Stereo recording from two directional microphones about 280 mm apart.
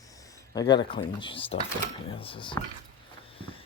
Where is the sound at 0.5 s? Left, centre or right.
Centre.